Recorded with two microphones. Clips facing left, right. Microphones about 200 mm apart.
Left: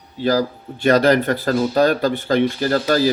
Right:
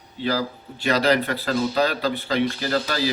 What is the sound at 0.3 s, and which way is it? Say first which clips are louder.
Speech: left 6 dB; 45° left (ahead or behind).